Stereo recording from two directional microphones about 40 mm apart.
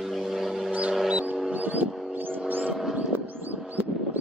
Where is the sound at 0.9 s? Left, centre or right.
Centre.